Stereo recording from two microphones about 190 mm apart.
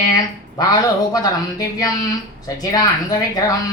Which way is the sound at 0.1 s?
20° left (ahead or behind).